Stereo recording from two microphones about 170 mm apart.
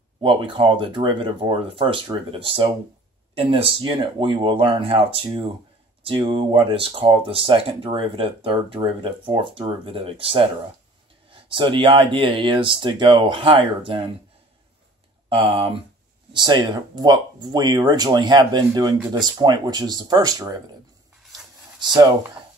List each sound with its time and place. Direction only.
0.2 s speech: 30° right (ahead or behind)
15.2 s speech: 30° right (ahead or behind)
21.3 s a sound: centre (ahead or behind)